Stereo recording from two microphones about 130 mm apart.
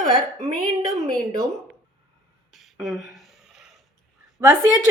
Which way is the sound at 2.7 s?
5° right (ahead or behind).